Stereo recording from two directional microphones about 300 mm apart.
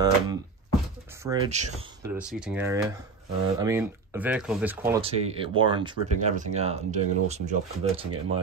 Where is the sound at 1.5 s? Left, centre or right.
Right.